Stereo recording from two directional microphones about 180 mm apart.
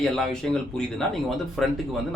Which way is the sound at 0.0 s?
5° left (ahead or behind).